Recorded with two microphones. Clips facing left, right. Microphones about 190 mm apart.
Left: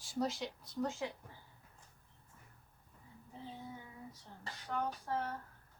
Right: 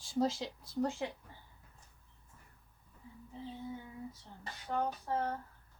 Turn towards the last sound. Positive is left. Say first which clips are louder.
# right 3 dB
turn(degrees=-25)  # may be behind; listen again after turning